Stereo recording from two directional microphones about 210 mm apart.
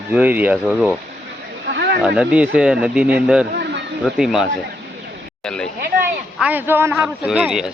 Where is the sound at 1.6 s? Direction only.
55° right (ahead or behind).